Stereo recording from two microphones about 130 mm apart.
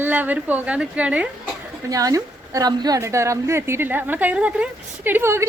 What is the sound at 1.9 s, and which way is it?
A woman's voice, 25° right (ahead or behind).